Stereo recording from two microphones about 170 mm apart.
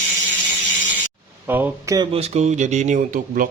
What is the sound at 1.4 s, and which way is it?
Speech, 10° right (ahead or behind).